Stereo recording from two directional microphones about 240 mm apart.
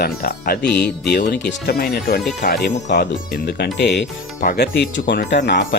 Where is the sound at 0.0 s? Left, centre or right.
Left.